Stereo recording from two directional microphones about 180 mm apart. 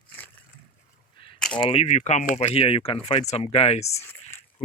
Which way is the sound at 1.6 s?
35° left (ahead or behind).